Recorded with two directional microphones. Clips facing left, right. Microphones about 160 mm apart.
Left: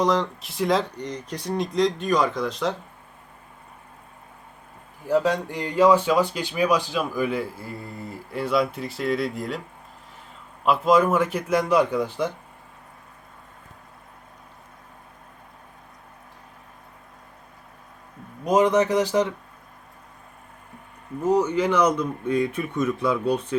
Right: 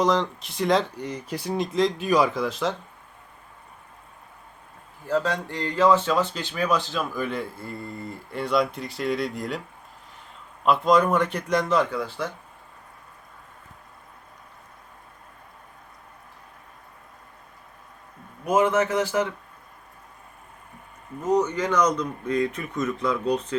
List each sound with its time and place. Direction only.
0.0 s speech: centre (ahead or behind)
5.0 s speech: 10° left (ahead or behind)
10.7 s speech: 5° left (ahead or behind)
18.4 s speech: 15° left (ahead or behind)
21.2 s speech: 10° left (ahead or behind)